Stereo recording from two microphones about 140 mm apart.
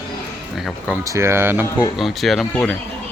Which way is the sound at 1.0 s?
20° right (ahead or behind).